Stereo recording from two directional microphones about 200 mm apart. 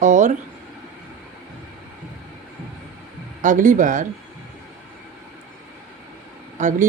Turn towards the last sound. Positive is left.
turn(degrees=-35)  # may be behind; listen again after turning